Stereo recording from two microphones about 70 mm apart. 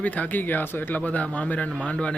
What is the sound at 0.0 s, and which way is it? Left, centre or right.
Speech, left.